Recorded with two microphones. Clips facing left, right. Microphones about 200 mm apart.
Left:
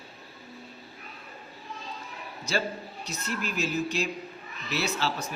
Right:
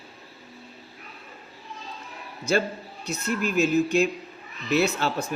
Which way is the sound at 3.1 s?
50° right (ahead or behind).